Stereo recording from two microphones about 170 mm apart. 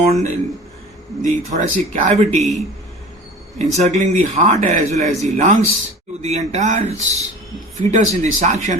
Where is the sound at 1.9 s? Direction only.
45° right (ahead or behind).